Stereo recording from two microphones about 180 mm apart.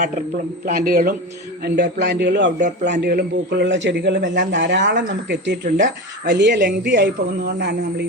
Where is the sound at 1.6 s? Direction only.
65° right (ahead or behind).